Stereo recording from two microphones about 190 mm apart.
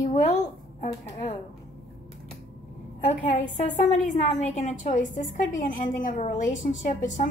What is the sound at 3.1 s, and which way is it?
A woman's voice, 40° left (ahead or behind).